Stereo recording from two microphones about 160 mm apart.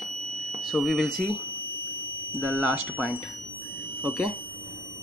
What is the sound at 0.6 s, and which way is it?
Speech, centre (ahead or behind).